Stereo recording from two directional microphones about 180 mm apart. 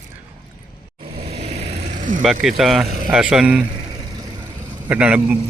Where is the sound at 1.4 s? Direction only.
35° right (ahead or behind).